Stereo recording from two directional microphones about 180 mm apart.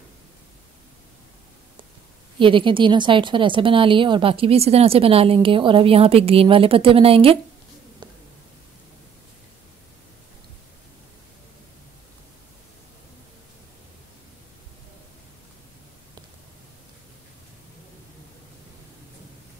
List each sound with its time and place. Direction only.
2.3 s a woman's voice: 30° right (ahead or behind)